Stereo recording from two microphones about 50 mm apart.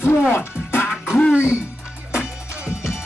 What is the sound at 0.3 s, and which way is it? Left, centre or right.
Music, left.